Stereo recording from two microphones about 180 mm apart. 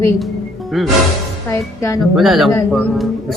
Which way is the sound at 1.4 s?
15° left (ahead or behind).